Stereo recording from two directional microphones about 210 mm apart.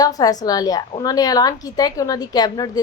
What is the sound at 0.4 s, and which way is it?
A woman's voice, 20° left (ahead or behind).